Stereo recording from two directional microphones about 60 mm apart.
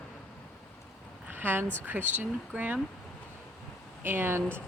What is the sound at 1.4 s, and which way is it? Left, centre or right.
Speech, right.